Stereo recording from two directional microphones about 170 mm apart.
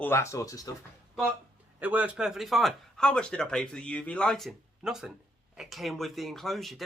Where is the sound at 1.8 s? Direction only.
10° right (ahead or behind).